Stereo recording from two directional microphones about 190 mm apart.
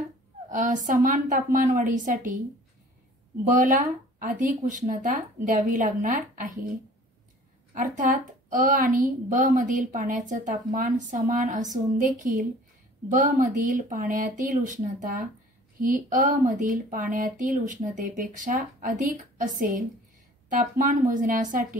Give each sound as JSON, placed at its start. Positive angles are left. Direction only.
{"t": 0.6, "sound": "speech", "side_deg": -40}
{"t": 3.4, "sound": "speech", "side_deg": -40}
{"t": 7.7, "sound": "speech", "side_deg": -45}